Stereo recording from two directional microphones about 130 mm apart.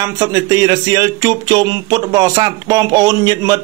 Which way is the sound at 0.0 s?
30° right (ahead or behind).